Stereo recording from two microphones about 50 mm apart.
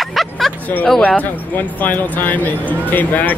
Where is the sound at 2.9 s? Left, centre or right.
Left.